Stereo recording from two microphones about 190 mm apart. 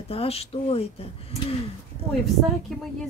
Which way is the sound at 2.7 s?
Centre (ahead or behind).